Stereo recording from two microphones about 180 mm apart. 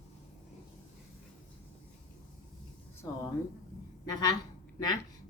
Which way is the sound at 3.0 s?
15° left (ahead or behind).